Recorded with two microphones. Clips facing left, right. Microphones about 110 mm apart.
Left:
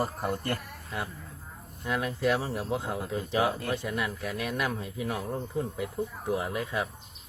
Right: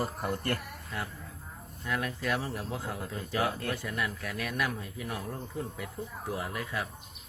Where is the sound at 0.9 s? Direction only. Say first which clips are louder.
Left 3 dB; 20° left (ahead or behind).